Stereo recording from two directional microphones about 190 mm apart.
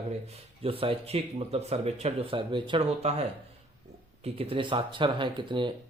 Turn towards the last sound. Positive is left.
turn(degrees=-25)  # may be behind; listen again after turning